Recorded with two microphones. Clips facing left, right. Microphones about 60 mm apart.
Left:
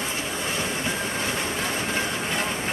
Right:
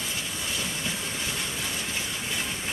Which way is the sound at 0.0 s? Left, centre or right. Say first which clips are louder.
Left 5 dB; left.